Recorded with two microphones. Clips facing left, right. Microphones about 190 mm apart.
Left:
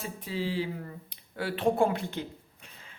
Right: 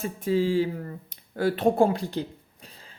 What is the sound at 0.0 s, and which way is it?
Speech, 45° right (ahead or behind).